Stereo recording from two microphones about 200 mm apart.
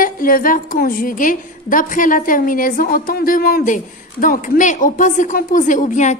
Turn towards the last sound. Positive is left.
turn(degrees=40)  # may be behind; listen again after turning